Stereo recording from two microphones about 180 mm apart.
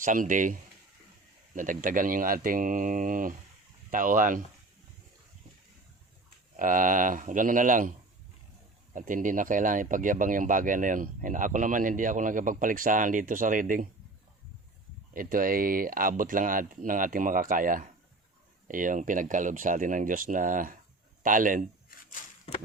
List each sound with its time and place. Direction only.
0.0 s speech: 45° right (ahead or behind)
6.6 s speech: 45° right (ahead or behind)
8.9 s speech: 45° right (ahead or behind)
15.1 s speech: 50° right (ahead or behind)
21.9 s a sound: 50° left (ahead or behind)